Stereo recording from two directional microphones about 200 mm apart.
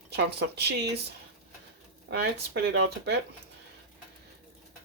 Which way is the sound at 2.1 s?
55° right (ahead or behind).